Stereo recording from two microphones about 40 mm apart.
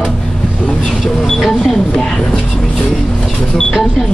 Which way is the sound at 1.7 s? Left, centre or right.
Centre.